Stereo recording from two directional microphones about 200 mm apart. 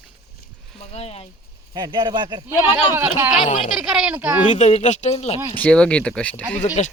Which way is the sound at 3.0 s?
10° right (ahead or behind).